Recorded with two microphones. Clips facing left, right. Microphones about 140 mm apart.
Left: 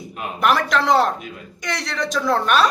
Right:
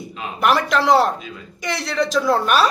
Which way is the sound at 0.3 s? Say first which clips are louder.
Right 1 dB; centre (ahead or behind).